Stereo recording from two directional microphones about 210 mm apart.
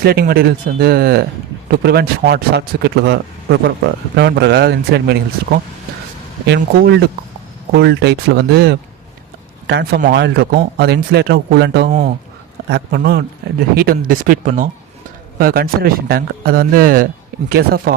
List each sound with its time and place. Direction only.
0.0 s a man's voice: 45° right (ahead or behind)